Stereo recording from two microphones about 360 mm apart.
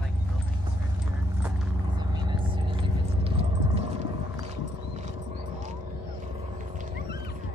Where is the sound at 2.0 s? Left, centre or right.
Centre.